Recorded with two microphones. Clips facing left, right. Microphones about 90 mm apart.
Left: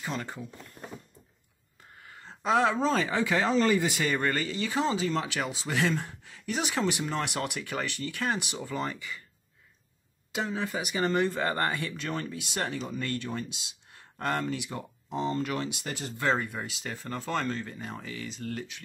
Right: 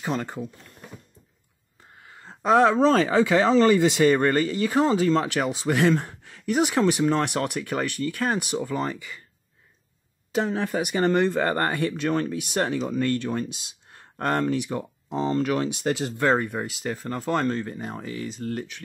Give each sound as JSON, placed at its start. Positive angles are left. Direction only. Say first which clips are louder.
{"t": 2.2, "sound": "a sound", "louder": "right 7 dB", "side_deg": -40}
{"t": 2.7, "sound": "speech", "louder": "right 8 dB", "side_deg": -60}
{"t": 4.0, "sound": "speech", "louder": "right 9 dB", "side_deg": -45}
{"t": 6.8, "sound": "speech", "louder": "right 7 dB", "side_deg": -55}
{"t": 7.6, "sound": "speech", "louder": "right 7 dB", "side_deg": -40}
{"t": 10.4, "sound": "speech", "louder": "right 5 dB", "side_deg": -60}
{"t": 11.5, "sound": "speech", "louder": "right 6 dB", "side_deg": -50}
{"t": 13.0, "sound": "speech", "louder": "right 8 dB", "side_deg": -55}
{"t": 15.3, "sound": "speech", "louder": "right 7 dB", "side_deg": -70}
{"t": 16.1, "sound": "speech", "louder": "right 3 dB", "side_deg": -45}